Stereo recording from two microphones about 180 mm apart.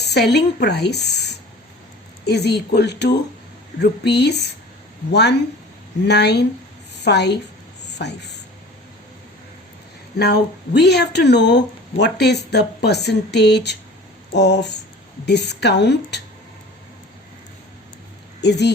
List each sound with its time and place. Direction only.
0.0 s a woman's voice: 65° left (ahead or behind)
10.2 s speech: 65° left (ahead or behind)
18.3 s speech: 70° left (ahead or behind)